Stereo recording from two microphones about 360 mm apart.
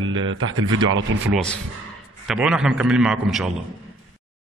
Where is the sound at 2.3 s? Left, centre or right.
Centre.